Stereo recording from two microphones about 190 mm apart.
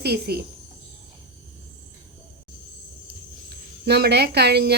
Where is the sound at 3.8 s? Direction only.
60° right (ahead or behind).